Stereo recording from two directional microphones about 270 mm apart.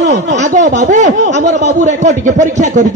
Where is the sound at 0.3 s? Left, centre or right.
Right.